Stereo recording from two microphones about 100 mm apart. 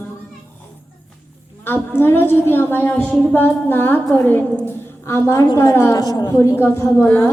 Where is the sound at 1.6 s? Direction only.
20° left (ahead or behind); by 6.3 s 40° left (ahead or behind).